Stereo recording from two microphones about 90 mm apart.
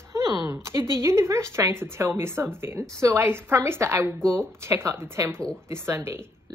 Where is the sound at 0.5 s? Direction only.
30° right (ahead or behind).